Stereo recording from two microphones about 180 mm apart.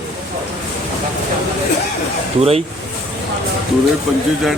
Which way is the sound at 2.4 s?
35° right (ahead or behind).